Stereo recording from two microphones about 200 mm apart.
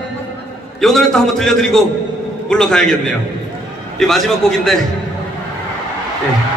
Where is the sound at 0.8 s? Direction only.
Centre (ahead or behind).